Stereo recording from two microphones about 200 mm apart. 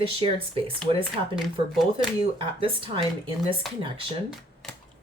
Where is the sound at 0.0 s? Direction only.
25° right (ahead or behind).